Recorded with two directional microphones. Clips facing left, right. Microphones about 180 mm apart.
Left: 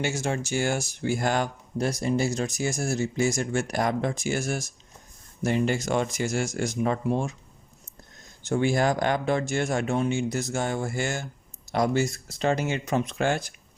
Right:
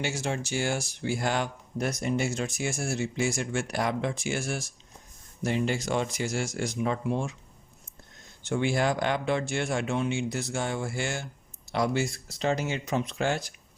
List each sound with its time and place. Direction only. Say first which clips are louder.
0.0 s speech: left 3 dB; 45° left (ahead or behind)
1.8 s speech: left 3 dB; 30° left (ahead or behind)
8.4 s speech: left 3 dB; 40° left (ahead or behind)